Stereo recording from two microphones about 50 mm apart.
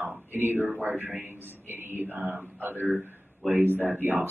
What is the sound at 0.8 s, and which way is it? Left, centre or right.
Speech, right.